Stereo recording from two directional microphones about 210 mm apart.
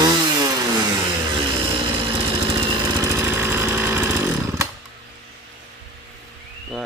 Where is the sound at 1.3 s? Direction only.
25° right (ahead or behind).